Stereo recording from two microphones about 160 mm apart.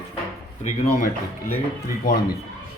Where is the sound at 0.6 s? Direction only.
50° left (ahead or behind).